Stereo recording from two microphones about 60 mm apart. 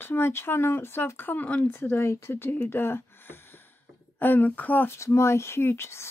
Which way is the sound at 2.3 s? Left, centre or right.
Left.